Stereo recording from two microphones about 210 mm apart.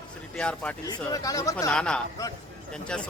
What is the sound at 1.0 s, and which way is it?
Speech, 15° left (ahead or behind).